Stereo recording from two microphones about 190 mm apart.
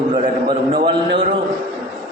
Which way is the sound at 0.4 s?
25° right (ahead or behind).